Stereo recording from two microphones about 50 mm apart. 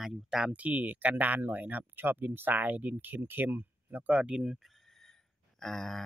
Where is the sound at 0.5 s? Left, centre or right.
Right.